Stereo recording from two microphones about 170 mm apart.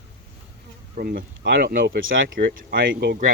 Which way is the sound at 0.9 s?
65° right (ahead or behind).